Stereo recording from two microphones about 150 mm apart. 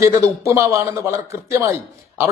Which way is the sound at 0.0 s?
20° right (ahead or behind).